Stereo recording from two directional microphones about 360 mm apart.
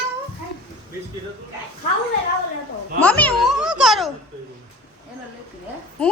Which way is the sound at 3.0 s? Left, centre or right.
Centre.